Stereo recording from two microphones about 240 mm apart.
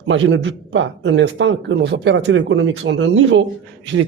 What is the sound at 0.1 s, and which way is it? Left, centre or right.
A man's voice, right.